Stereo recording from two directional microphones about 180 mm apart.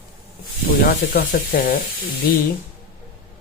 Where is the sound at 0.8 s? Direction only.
50° left (ahead or behind).